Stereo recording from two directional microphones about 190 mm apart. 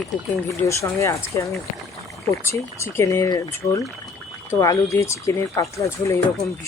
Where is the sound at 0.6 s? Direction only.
15° left (ahead or behind).